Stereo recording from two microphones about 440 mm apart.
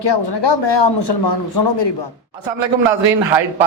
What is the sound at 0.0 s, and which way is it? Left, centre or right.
Speech, left.